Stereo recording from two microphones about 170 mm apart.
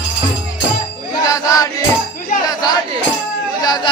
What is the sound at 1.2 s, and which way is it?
Music, 20° left (ahead or behind).